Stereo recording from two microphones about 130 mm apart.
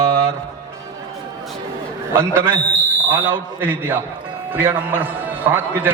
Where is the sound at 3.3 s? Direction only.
15° right (ahead or behind).